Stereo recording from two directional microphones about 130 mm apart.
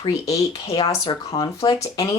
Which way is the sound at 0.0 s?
25° left (ahead or behind).